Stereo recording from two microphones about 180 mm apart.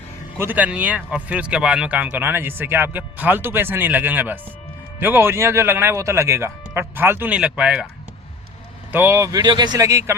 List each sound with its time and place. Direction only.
0.3 s speech: 10° right (ahead or behind)
8.9 s speech: 10° right (ahead or behind)